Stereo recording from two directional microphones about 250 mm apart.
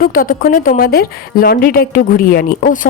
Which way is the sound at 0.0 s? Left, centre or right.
Left.